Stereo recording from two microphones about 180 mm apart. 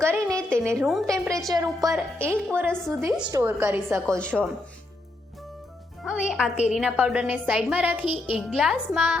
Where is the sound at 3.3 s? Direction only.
10° right (ahead or behind).